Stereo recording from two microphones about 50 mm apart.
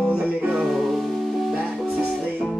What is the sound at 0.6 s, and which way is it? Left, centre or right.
Music, centre.